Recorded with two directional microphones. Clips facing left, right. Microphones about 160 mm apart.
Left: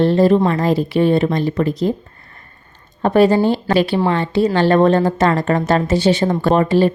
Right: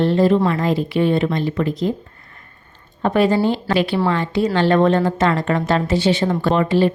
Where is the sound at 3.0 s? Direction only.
40° left (ahead or behind).